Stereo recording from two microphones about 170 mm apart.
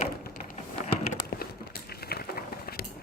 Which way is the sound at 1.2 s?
65° left (ahead or behind).